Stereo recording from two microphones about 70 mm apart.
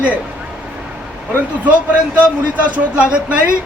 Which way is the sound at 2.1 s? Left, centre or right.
Centre.